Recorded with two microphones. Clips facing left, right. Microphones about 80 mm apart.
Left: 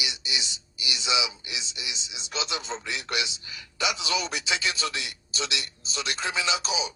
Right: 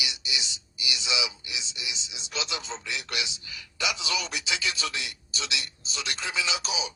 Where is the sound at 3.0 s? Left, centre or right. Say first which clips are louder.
Left 4 dB; left.